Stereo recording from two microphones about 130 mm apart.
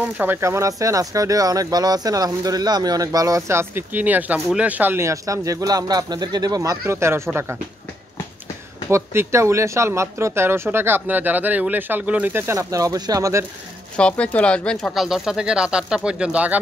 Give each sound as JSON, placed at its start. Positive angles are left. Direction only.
{"t": 0.0, "sound": "speech", "side_deg": -15}
{"t": 8.9, "sound": "speech", "side_deg": -20}
{"t": 13.9, "sound": "speech", "side_deg": 10}